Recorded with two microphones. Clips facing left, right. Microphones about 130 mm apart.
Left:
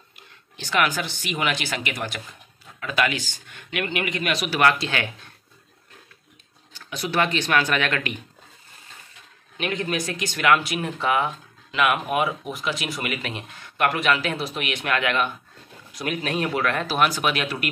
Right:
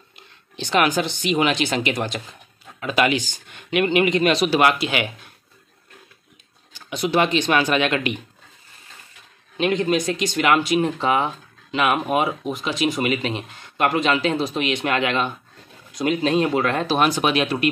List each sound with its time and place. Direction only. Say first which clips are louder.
0.1 s speech: right 2 dB; 25° right (ahead or behind)
6.7 s speech: right 6 dB; 15° right (ahead or behind)
9.6 s speech: right 7 dB; 25° right (ahead or behind)